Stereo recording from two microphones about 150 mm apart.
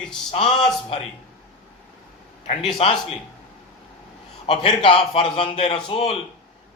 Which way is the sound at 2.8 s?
40° left (ahead or behind).